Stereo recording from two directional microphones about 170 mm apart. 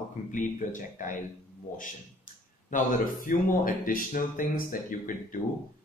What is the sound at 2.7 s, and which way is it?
Speech, 50° left (ahead or behind).